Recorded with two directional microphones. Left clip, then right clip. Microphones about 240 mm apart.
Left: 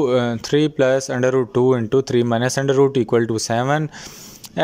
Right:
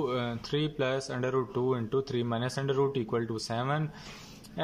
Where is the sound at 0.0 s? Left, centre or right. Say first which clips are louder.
Left 14 dB; left.